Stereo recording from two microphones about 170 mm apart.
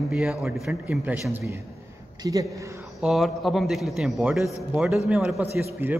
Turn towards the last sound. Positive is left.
turn(degrees=-15)  # may be behind; listen again after turning